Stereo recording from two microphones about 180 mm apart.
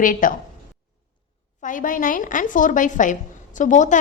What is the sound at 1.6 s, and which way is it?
A woman's voice, 45° left (ahead or behind).